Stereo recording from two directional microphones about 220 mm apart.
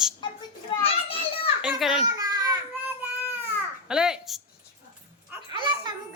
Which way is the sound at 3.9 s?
5° right (ahead or behind).